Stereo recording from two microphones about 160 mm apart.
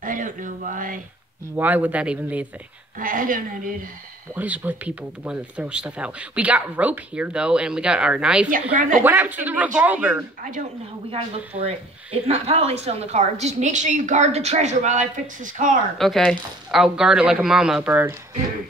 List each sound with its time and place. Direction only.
0.0 s speech: 55° right (ahead or behind)
1.6 s speech: 10° right (ahead or behind)
3.0 s a woman's voice: 60° right (ahead or behind)
4.4 s speech: 10° right (ahead or behind)
8.7 s a woman's voice: 60° right (ahead or behind)
9.0 s speech: 10° right (ahead or behind)
11.1 s speech: 35° right (ahead or behind)
16.0 s speech: centre (ahead or behind)